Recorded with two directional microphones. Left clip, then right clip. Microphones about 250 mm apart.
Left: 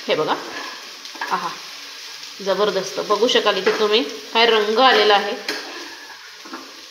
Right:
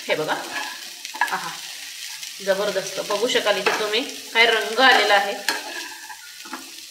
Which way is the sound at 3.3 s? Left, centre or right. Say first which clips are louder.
Left 1 dB; left.